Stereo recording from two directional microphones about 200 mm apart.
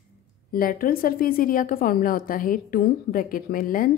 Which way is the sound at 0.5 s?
45° left (ahead or behind).